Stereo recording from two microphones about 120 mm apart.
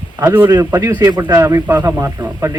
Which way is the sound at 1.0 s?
35° right (ahead or behind).